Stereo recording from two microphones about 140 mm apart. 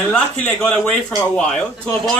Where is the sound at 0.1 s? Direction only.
5° left (ahead or behind).